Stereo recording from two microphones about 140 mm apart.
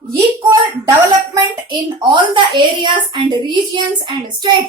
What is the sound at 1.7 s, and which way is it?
A woman's voice, 35° right (ahead or behind).